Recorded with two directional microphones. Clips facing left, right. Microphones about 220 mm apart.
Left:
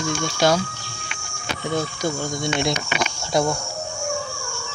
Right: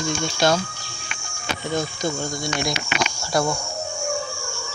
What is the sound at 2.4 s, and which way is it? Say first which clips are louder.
Speech: left 3 dB; 25° left (ahead or behind).